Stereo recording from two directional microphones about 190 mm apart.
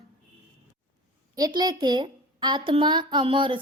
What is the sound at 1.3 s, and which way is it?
Speech, 20° right (ahead or behind).